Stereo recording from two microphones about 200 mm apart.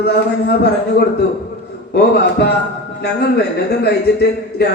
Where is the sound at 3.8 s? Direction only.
55° left (ahead or behind).